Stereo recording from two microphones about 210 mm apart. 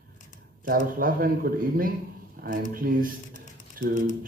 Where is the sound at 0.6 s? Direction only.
40° right (ahead or behind).